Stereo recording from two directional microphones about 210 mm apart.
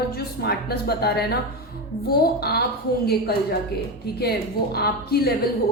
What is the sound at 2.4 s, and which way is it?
Speech, 50° left (ahead or behind).